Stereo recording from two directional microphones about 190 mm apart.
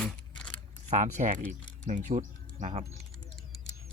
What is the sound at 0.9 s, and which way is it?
Speech, 40° right (ahead or behind).